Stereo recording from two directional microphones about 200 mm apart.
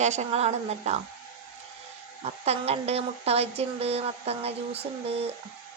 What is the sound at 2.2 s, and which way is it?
Speech, 30° right (ahead or behind).